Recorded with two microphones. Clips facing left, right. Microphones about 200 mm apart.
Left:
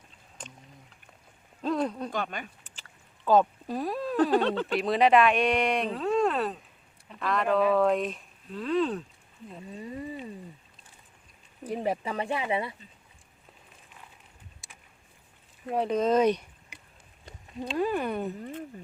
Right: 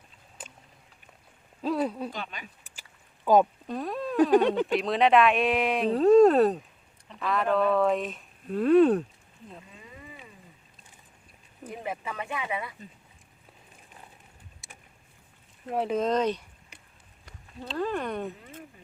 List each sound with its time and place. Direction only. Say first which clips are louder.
0.4 s boat: left 1 dB; 5° right (ahead or behind)
1.6 s a sound: right 1 dB; 5° right (ahead or behind)
2.1 s speech: left 6 dB; 50° left (ahead or behind)
2.6 s a sound: even; 10° right (ahead or behind)
3.7 s speech: left 1 dB; 5° left (ahead or behind)
4.3 s speech: right 4 dB; 15° right (ahead or behind)
4.6 s speech: even; centre (ahead or behind)
5.9 s speech: right 9 dB; 40° right (ahead or behind)
7.1 s speech: even; centre (ahead or behind)
8.4 s speech: right 8 dB; 55° right (ahead or behind)
9.7 s a sound: left 11 dB; 35° left (ahead or behind)
11.6 s speech: left 6 dB; 35° left (ahead or behind)
15.7 s speech: left 2 dB; centre (ahead or behind)